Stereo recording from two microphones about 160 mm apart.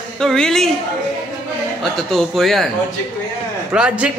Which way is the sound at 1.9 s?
Centre (ahead or behind).